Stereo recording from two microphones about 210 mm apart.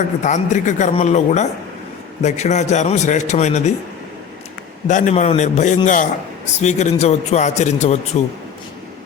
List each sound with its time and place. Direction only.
0.2 s a man's voice: 35° left (ahead or behind)
4.9 s a man's voice: 35° left (ahead or behind)